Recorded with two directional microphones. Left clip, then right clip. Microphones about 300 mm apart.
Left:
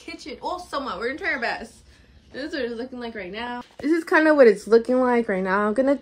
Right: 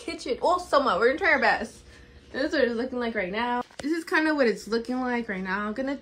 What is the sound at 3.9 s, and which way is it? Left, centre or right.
A woman's voice, centre.